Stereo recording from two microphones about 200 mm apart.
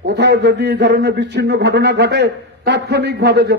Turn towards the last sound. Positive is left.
turn(degrees=-55)  # may be behind; listen again after turning